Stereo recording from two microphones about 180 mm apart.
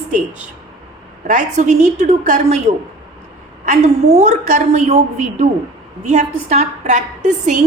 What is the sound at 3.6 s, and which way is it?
A woman's voice, 40° right (ahead or behind).